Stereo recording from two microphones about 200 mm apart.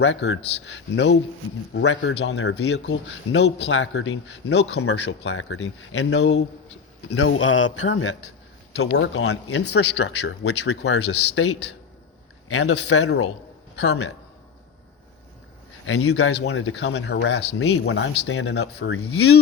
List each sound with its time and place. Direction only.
0.0 s speech: 65° left (ahead or behind)
7.1 s a man's voice: 80° left
8.7 s speech: 60° left (ahead or behind); by 13.2 s 90° left
13.7 s speech: 65° left (ahead or behind)
15.9 s speech: 90° left